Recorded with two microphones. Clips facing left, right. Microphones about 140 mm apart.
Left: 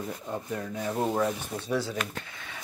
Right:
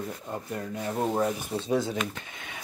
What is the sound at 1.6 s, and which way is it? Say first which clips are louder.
Speech: right 2 dB; 20° right (ahead or behind).